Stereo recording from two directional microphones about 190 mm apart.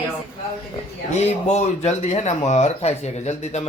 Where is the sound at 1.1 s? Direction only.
35° left (ahead or behind).